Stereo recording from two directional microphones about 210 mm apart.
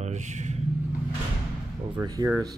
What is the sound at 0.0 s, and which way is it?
Vehicle, 35° right (ahead or behind).